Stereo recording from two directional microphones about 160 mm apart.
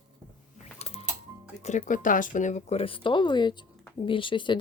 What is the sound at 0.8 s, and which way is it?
Music, 40° left (ahead or behind).